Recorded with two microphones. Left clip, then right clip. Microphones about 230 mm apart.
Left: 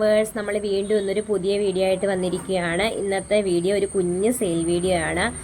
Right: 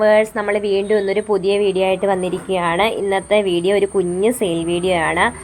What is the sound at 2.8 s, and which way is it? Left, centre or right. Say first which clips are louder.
Speech: right 6 dB; right.